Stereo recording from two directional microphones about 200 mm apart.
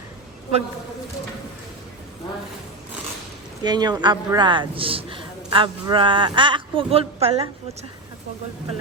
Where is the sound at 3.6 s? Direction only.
20° right (ahead or behind).